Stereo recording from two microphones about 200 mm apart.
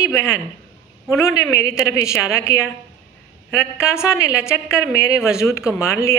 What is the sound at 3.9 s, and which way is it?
A man's voice, 15° left (ahead or behind).